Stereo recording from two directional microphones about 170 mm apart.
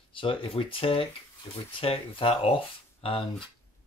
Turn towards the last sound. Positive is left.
turn(degrees=30)  # may be behind; listen again after turning